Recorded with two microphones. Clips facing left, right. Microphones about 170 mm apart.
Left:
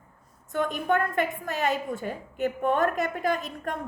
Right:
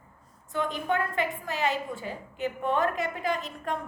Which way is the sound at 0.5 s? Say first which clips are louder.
Left 3 dB; 50° left (ahead or behind).